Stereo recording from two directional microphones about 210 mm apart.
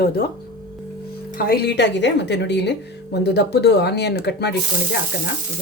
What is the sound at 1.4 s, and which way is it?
A woman's voice, 45° left (ahead or behind).